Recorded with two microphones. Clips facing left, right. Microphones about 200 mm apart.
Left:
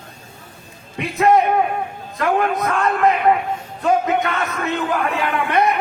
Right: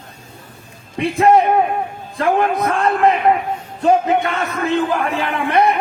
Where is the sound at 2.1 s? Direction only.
30° right (ahead or behind).